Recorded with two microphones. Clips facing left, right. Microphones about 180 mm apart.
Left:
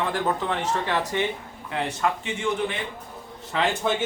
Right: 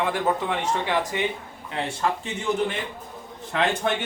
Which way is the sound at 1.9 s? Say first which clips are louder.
Right 1 dB; 30° right (ahead or behind).